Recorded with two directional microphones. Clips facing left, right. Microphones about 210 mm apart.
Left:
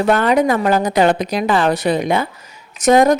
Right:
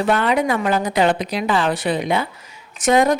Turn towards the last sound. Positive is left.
turn(degrees=40)  # may be behind; listen again after turning